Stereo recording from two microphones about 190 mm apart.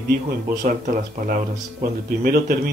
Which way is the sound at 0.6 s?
45° right (ahead or behind).